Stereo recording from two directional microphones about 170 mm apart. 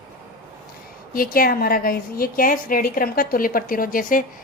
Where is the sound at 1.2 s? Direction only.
55° left (ahead or behind).